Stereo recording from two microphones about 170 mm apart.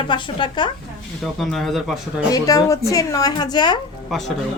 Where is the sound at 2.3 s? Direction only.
20° left (ahead or behind).